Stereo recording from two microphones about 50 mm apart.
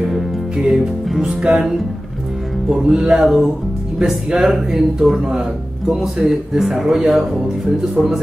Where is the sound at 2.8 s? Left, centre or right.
Centre.